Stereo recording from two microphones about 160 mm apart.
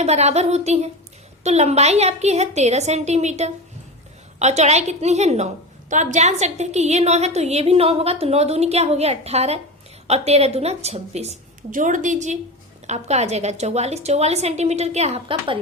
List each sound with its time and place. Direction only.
0.0 s a woman's voice: 40° right (ahead or behind)